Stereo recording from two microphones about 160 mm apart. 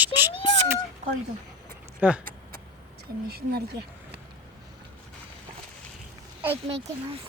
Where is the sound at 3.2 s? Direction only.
80° right.